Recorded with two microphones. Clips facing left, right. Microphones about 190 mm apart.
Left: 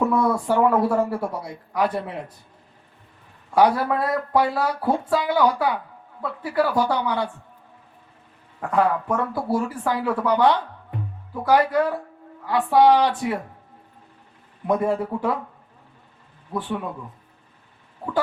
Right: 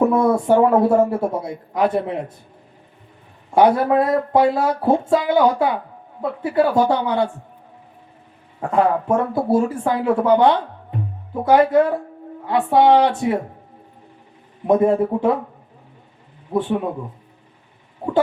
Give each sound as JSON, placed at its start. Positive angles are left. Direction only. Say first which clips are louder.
{"t": 0.0, "sound": "speech", "louder": "right 5 dB", "side_deg": -25}
{"t": 3.5, "sound": "speech", "louder": "right 4 dB", "side_deg": -25}
{"t": 8.6, "sound": "speech", "louder": "right 3 dB", "side_deg": -25}
{"t": 14.7, "sound": "speech", "louder": "right 6 dB", "side_deg": -25}
{"t": 16.5, "sound": "speech", "louder": "right 7 dB", "side_deg": -25}